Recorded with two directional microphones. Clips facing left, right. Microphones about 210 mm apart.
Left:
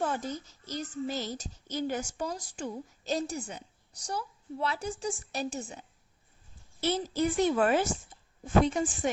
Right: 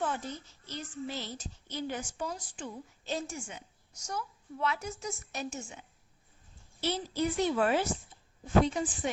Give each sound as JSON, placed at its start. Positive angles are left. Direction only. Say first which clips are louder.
{"t": 0.0, "sound": "a child's voice", "louder": "left 3 dB", "side_deg": 40}
{"t": 6.8, "sound": "a child's voice", "louder": "left 3 dB", "side_deg": 45}